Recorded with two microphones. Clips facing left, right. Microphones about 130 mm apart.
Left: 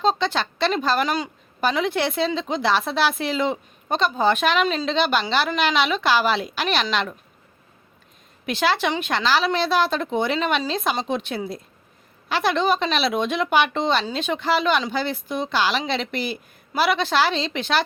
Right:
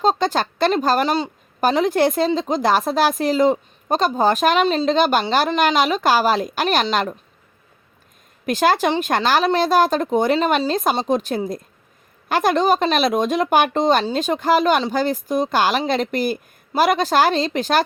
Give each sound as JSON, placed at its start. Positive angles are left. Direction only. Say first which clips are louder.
{"t": 0.0, "sound": "speech", "louder": "right 3 dB", "side_deg": -40}
{"t": 4.9, "sound": "speech", "louder": "right 4 dB", "side_deg": -45}
{"t": 8.4, "sound": "speech", "louder": "right 5 dB", "side_deg": -45}